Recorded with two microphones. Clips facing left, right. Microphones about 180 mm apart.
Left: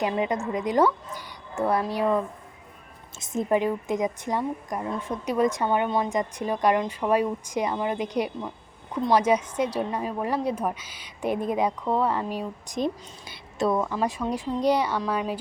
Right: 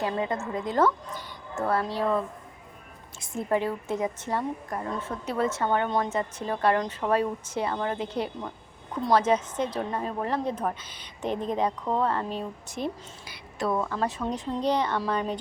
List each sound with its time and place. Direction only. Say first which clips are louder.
0.0 s a woman's voice: left 3 dB; 15° left (ahead or behind)
13.7 s a woman's voice: left 2 dB; 10° left (ahead or behind)